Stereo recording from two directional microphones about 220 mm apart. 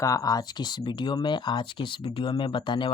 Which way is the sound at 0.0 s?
15° left (ahead or behind).